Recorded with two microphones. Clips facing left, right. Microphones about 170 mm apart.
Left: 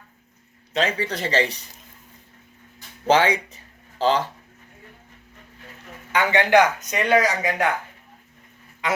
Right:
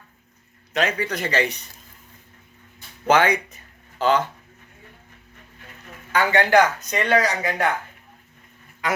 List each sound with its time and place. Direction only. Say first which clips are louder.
0.7 s speech: even; 30° left (ahead or behind)
3.1 s speech: even; 30° left (ahead or behind)
6.1 s speech: even; 20° left (ahead or behind)